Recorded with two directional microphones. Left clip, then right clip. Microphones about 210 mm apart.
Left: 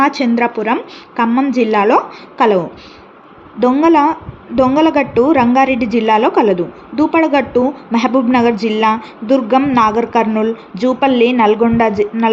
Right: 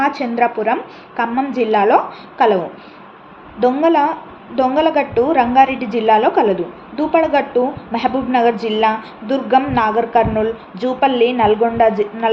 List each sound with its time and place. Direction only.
0.0 s a woman's voice: 50° left (ahead or behind)